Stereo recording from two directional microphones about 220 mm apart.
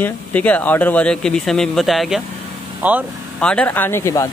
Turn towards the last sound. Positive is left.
turn(degrees=10)  # may be behind; listen again after turning